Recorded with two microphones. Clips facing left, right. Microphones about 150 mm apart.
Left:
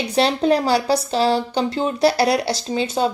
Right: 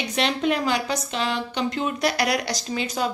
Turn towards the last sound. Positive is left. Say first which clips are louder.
# left 6 dB
turn(degrees=30)  # may be behind; listen again after turning